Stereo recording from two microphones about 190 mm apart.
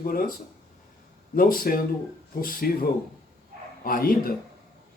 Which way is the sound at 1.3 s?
50° left (ahead or behind).